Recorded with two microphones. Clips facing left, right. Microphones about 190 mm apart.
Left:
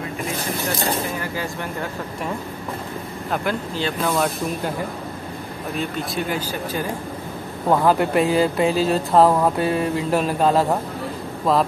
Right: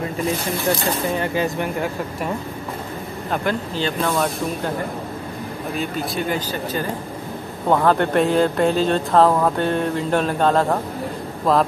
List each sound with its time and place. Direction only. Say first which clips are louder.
1.1 s speech: right 6 dB; 20° right (ahead or behind)
3.3 s speech: right 1 dB; 5° left (ahead or behind)
5.8 s speech: right 1 dB; 5° left (ahead or behind)